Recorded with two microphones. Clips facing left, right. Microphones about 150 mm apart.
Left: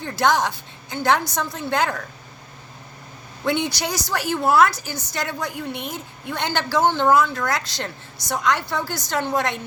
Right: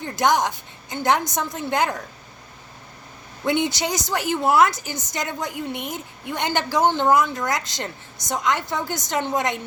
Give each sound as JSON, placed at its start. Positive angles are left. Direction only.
{"t": 0.0, "sound": "a woman's voice", "side_deg": -15}
{"t": 3.4, "sound": "a woman's voice", "side_deg": -20}